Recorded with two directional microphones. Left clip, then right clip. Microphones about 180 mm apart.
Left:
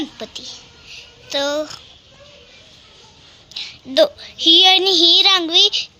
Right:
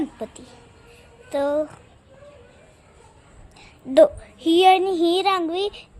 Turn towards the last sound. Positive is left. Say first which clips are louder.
# left 8 dB
turn(degrees=-5)  # may be behind; listen again after turning